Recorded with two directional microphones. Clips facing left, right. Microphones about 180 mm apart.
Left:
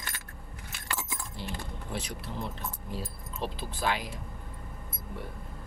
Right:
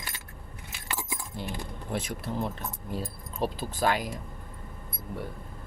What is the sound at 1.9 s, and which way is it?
Speech, 50° right (ahead or behind).